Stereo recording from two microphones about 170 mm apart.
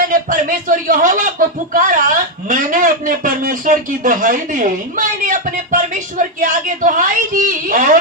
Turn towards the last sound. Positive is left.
turn(degrees=-50)  # may be behind; listen again after turning